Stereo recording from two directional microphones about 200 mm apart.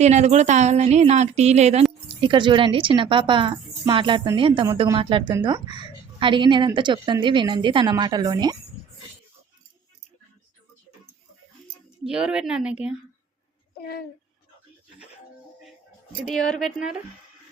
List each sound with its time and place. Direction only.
0.0 s a woman's voice: 35° right (ahead or behind); by 8.5 s 20° right (ahead or behind)
12.0 s speech: 5° right (ahead or behind)
13.7 s speech: 50° left (ahead or behind)
16.3 s speech: centre (ahead or behind)